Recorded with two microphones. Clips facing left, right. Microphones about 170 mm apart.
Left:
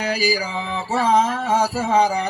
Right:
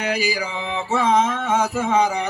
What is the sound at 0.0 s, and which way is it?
Music, 35° left (ahead or behind).